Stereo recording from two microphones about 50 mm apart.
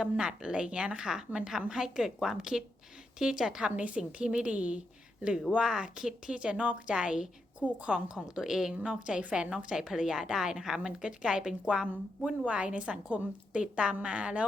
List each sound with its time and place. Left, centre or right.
0.0 s a woman's voice: centre
3.8 s a woman's voice: right